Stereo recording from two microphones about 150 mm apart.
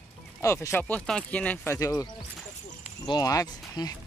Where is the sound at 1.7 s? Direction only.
25° left (ahead or behind).